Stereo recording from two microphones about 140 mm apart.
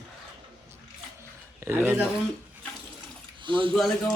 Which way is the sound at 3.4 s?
35° right (ahead or behind).